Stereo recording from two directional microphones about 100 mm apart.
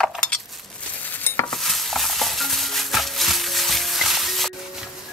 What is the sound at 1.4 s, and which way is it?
Stir, centre (ahead or behind).